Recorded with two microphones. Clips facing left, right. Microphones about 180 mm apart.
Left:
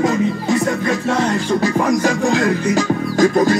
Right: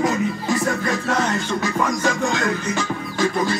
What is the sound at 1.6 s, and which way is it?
Music, 35° left (ahead or behind).